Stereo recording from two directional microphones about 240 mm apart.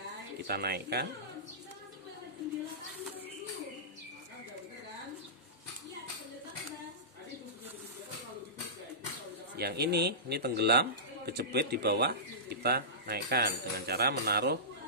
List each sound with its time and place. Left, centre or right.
0.4 s speech: right
9.6 s speech: right